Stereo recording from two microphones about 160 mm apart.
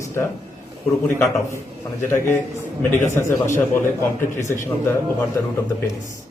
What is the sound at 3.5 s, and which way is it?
Speech, 15° left (ahead or behind).